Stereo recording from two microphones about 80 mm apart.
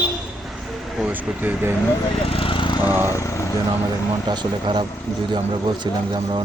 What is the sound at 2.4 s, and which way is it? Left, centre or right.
Lawn mower, left.